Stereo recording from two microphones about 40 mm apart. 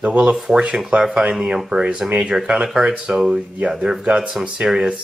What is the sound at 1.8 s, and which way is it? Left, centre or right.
Speech, right.